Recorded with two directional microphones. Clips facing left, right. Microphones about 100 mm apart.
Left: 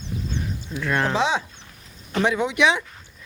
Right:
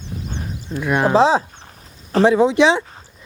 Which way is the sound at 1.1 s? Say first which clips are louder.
Right 8 dB; 35° right (ahead or behind).